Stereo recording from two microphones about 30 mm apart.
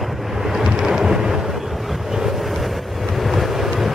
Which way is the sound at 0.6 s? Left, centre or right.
Centre.